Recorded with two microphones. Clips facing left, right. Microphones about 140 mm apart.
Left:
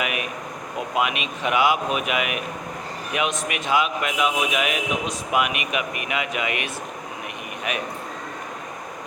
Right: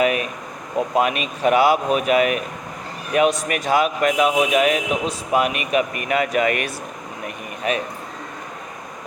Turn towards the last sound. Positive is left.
turn(degrees=-35)  # may be behind; listen again after turning